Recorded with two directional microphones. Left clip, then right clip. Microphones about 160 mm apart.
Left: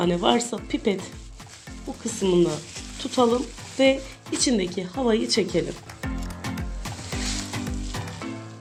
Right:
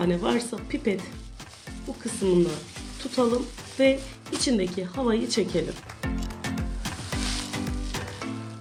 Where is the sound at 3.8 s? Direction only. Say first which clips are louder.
Left 2 dB; 35° left (ahead or behind).